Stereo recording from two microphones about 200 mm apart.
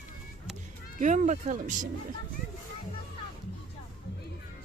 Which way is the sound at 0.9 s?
35° right (ahead or behind).